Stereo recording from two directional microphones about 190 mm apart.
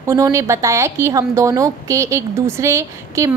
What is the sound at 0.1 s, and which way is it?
A woman's voice, 15° right (ahead or behind).